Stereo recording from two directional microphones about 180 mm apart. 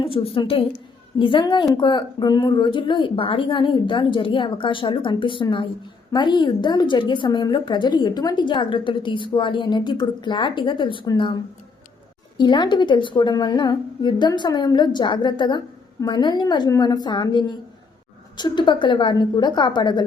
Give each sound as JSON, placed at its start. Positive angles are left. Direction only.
{"t": 0.0, "sound": "a woman's voice", "side_deg": 30}